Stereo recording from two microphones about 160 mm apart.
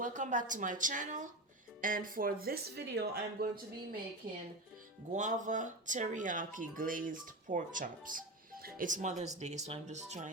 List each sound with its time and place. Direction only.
0.0 s speech: 55° right (ahead or behind); by 3.6 s 80° right
5.1 s speech: 50° right (ahead or behind)